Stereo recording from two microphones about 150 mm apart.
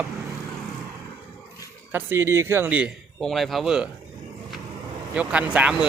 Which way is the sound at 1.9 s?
15° right (ahead or behind).